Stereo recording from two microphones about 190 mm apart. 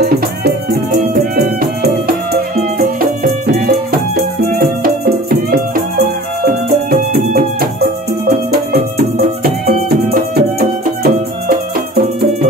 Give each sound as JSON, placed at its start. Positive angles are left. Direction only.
{"t": 0.0, "sound": "music", "side_deg": -60}